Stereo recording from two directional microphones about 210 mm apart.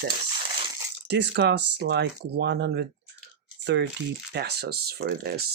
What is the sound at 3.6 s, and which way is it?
Crumpling, 55° right (ahead or behind).